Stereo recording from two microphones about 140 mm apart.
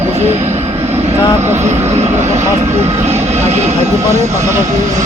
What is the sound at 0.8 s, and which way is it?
Vehicle, 50° right (ahead or behind).